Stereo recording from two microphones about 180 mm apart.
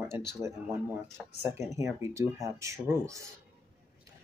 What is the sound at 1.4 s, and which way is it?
Speech, 15° right (ahead or behind).